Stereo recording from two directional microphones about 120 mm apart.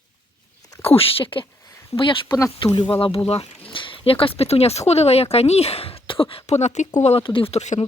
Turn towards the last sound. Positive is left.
turn(degrees=65)  # may be behind; listen again after turning